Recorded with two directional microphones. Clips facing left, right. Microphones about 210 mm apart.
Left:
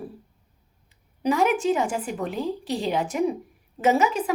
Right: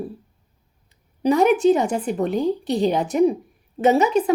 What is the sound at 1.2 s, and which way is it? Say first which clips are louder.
A woman's voice: right 6 dB; 35° right (ahead or behind).